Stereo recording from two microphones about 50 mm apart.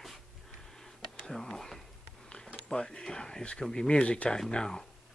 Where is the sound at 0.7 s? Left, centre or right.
Centre.